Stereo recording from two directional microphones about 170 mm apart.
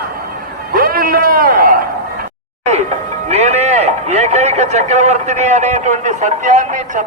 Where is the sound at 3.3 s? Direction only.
40° right (ahead or behind).